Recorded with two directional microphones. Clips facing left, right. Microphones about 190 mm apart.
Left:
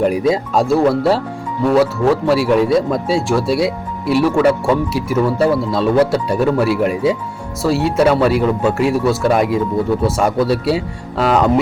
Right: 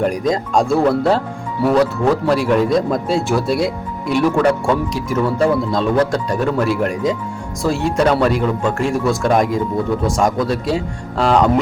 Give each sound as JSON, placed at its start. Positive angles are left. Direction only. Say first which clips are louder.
{"t": 0.0, "sound": "speech", "louder": "left 3 dB", "side_deg": 5}